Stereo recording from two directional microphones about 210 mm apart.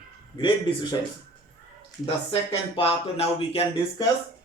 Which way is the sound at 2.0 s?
25° left (ahead or behind).